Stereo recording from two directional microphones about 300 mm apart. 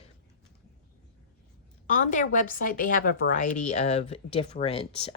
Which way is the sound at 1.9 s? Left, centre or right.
Left.